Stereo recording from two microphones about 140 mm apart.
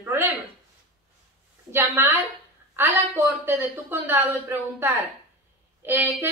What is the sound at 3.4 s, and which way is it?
A woman's voice, 15° right (ahead or behind).